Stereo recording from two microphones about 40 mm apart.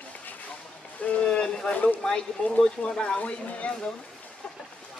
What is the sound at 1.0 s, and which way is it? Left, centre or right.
Boat, left.